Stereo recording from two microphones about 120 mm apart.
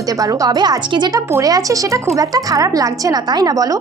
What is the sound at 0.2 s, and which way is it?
A woman's voice, 30° right (ahead or behind).